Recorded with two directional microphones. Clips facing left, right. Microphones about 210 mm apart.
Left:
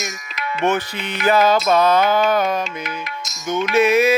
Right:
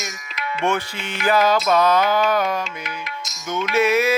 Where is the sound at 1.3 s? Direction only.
25° left (ahead or behind).